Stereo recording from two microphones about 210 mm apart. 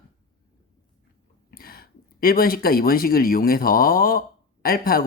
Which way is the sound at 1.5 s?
45° left (ahead or behind).